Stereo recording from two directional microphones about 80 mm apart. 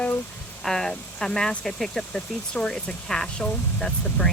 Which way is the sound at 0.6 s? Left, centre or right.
Centre.